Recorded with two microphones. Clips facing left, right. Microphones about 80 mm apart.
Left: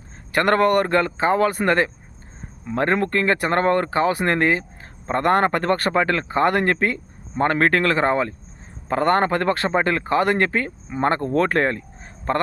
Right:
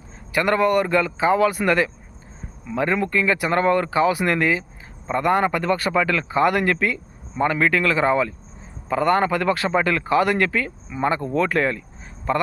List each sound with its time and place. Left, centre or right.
0.3 s speech: left
5.0 s speech: left
7.3 s speech: left